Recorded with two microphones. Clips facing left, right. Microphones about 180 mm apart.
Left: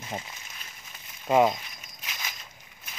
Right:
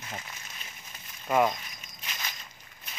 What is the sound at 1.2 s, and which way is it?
Speech, 20° left (ahead or behind).